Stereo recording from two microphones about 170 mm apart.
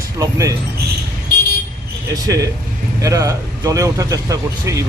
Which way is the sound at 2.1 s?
20° right (ahead or behind).